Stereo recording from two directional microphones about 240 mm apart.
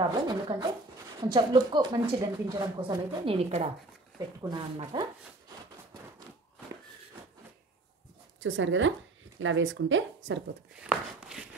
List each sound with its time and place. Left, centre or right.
0.0 s speech: centre
8.4 s speech: right
10.8 s a sound: centre